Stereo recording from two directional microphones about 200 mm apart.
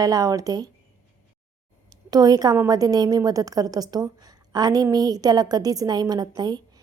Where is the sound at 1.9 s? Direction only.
20° right (ahead or behind).